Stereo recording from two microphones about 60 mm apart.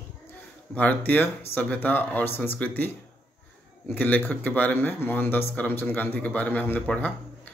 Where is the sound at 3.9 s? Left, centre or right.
Left.